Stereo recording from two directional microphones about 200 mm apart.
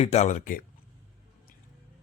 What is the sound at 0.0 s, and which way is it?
Speech, 35° left (ahead or behind).